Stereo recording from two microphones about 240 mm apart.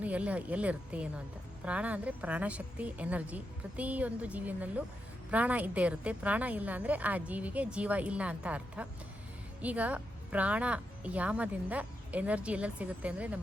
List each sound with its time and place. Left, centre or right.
0.0 s a woman's voice: centre